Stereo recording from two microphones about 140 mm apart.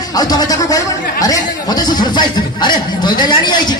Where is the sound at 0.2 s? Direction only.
25° left (ahead or behind).